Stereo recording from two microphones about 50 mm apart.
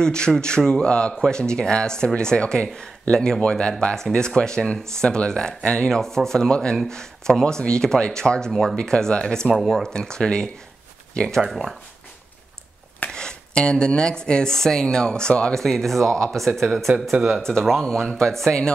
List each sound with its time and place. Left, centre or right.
0.0 s speech: centre
9.6 s speech: centre
9.8 s speech: centre
11.4 s speech: centre
13.1 s speech: centre
15.6 s speech: centre
17.4 s speech: centre